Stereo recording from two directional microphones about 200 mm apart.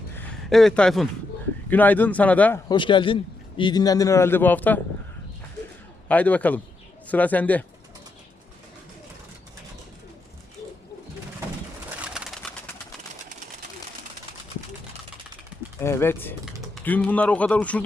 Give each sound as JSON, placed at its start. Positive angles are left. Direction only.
{"t": 0.2, "sound": "speech", "side_deg": 5}
{"t": 2.6, "sound": "a man's voice", "side_deg": 25}
{"t": 6.1, "sound": "speech", "side_deg": 5}
{"t": 11.9, "sound": "bird", "side_deg": -5}
{"t": 15.8, "sound": "a sound", "side_deg": 10}
{"t": 16.7, "sound": "speech", "side_deg": 5}